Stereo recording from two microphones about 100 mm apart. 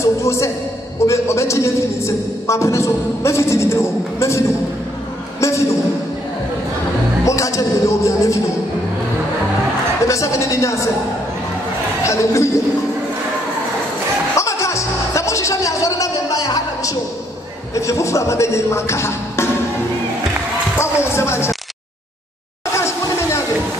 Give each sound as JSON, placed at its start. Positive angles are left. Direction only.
{"t": 0.0, "sound": "a man's voice", "side_deg": 30}
{"t": 5.4, "sound": "a sound", "side_deg": 30}
{"t": 7.2, "sound": "a sound", "side_deg": 35}
{"t": 10.0, "sound": "a woman's voice", "side_deg": 30}
{"t": 12.0, "sound": "a woman's voice", "side_deg": 30}
{"t": 14.3, "sound": "music", "side_deg": 30}
{"t": 17.7, "sound": "a man's voice", "side_deg": 30}
{"t": 20.7, "sound": "speech", "side_deg": 25}
{"t": 22.8, "sound": "a sound", "side_deg": 30}